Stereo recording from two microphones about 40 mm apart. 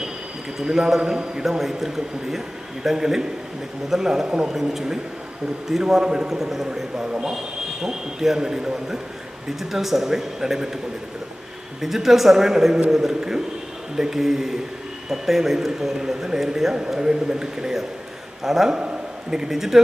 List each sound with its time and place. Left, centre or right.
0.6 s a man's voice: centre
6.4 s a man's voice: centre
6.7 s a man's voice: centre
11.8 s a man's voice: centre